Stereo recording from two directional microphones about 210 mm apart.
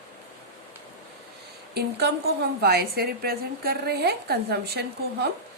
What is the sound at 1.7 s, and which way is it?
A woman's voice, 50° right (ahead or behind).